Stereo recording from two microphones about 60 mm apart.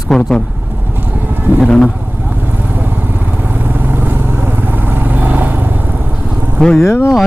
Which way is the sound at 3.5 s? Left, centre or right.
Right.